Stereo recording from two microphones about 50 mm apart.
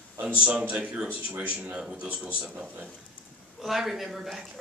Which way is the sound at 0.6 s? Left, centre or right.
Right.